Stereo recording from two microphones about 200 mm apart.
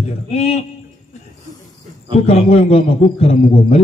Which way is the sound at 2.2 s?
30° left (ahead or behind).